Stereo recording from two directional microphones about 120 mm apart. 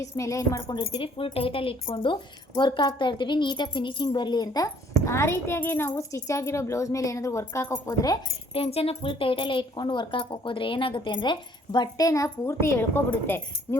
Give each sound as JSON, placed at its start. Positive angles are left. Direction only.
{"t": 0.0, "sound": "a woman's voice", "side_deg": 25}
{"t": 0.8, "sound": "a woman's voice", "side_deg": 45}
{"t": 8.5, "sound": "speech", "side_deg": 55}